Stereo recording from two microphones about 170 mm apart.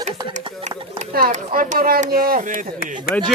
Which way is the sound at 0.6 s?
40° right (ahead or behind).